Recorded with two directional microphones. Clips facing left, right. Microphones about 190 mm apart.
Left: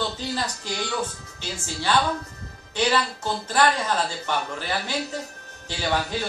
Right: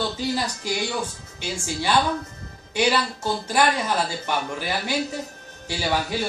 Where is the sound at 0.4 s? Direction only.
10° right (ahead or behind).